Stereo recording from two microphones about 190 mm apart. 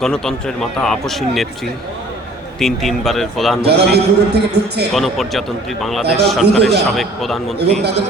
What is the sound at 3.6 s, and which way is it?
Speech, 60° right (ahead or behind).